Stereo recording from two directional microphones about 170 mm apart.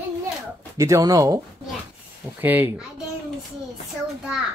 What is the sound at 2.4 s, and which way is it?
Speech, 10° right (ahead or behind).